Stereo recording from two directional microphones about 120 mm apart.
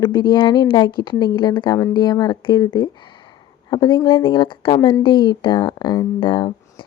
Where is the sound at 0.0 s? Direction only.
40° left (ahead or behind).